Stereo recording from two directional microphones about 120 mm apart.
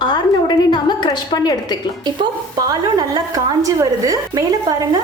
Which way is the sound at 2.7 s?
30° right (ahead or behind).